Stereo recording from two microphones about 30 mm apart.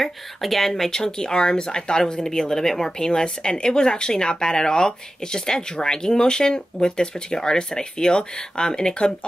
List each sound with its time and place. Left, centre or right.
0.0 s speech: centre; by 8.9 s left